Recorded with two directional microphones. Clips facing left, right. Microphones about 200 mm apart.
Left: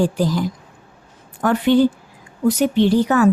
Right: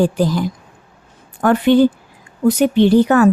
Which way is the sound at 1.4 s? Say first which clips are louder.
Right 3 dB; 60° right (ahead or behind).